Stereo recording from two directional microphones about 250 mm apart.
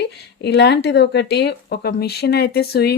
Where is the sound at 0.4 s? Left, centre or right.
Left.